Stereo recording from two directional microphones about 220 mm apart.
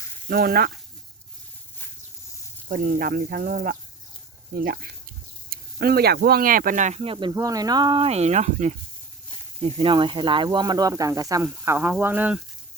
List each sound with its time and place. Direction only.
0.3 s speech: 45° right (ahead or behind)
2.6 s speech: 40° right (ahead or behind); by 12.4 s 10° right (ahead or behind)